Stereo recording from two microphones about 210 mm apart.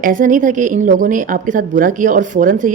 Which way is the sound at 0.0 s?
40° right (ahead or behind).